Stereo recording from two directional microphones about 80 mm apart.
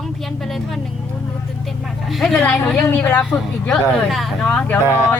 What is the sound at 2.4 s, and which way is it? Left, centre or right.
Speech, centre.